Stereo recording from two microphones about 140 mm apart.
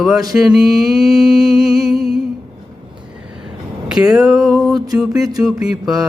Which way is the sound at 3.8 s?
5° right (ahead or behind).